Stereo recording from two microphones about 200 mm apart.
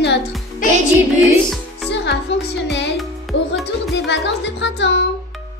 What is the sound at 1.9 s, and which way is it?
Music, 60° left (ahead or behind).